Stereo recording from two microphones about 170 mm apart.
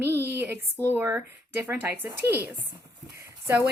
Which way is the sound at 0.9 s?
10° right (ahead or behind).